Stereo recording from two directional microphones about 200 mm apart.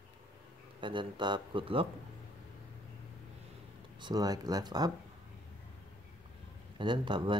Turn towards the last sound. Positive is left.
turn(degrees=-25)  # may be behind; listen again after turning